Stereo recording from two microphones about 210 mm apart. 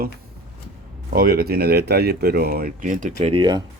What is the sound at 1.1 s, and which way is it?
Speech, 45° right (ahead or behind).